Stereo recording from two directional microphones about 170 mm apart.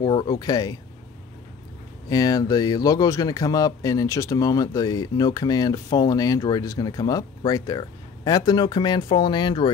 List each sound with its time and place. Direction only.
0.0 s speech: 25° left (ahead or behind)
2.0 s speech: 20° left (ahead or behind)